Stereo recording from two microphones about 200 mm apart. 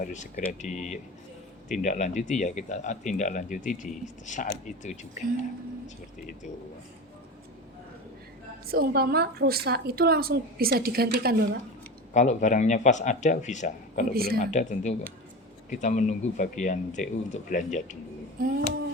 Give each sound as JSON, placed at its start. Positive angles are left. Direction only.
{"t": 0.0, "sound": "speech", "side_deg": 35}
{"t": 8.6, "sound": "a woman's voice", "side_deg": -50}
{"t": 12.1, "sound": "speech", "side_deg": 35}
{"t": 14.1, "sound": "a woman's voice", "side_deg": -50}
{"t": 14.3, "sound": "speech", "side_deg": 40}